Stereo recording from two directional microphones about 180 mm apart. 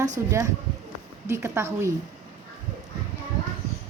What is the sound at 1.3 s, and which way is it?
Speech, 15° right (ahead or behind).